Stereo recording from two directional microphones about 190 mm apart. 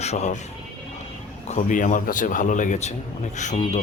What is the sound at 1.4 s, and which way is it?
Speech, 40° left (ahead or behind).